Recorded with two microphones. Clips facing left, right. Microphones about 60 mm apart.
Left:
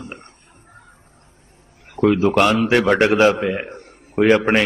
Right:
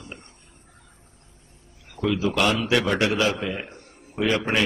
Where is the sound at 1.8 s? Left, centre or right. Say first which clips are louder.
Left 8 dB; left.